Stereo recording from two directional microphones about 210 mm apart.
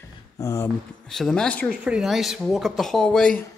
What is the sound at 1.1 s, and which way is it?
Speech, centre (ahead or behind).